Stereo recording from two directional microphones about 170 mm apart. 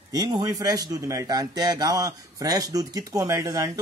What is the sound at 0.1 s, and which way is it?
Speech, 25° right (ahead or behind).